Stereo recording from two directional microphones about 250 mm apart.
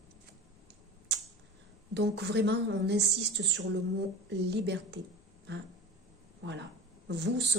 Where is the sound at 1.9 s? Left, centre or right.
Right.